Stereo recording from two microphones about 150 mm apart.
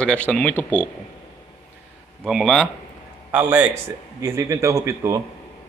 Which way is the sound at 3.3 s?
10° right (ahead or behind).